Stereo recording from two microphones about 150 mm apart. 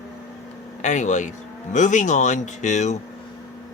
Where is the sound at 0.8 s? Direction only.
55° left (ahead or behind).